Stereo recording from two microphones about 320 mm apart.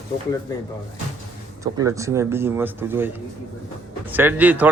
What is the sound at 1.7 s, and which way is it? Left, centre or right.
A man's voice, centre.